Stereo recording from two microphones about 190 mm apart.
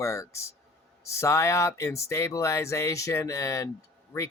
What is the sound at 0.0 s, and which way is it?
Speech, 15° left (ahead or behind).